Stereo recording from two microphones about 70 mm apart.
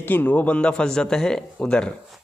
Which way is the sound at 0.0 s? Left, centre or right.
Left.